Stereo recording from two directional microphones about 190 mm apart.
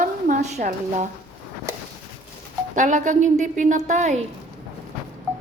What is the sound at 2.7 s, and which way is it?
Speech, 40° right (ahead or behind).